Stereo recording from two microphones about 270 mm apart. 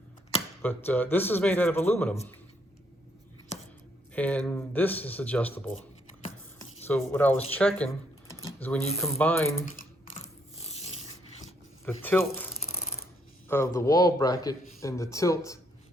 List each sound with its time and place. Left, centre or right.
0.6 s speech: centre
4.1 s speech: centre
6.8 s speech: centre
10.6 s zipper: left
11.9 s speech: centre
13.5 s speech: centre